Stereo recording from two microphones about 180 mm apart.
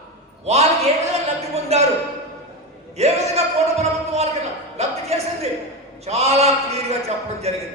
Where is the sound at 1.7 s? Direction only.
35° right (ahead or behind).